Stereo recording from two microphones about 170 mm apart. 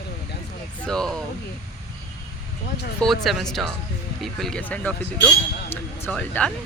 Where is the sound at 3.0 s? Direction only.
Centre (ahead or behind).